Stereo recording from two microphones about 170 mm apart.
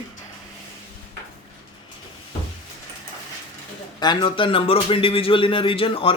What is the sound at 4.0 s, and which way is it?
A man's voice, 25° left (ahead or behind).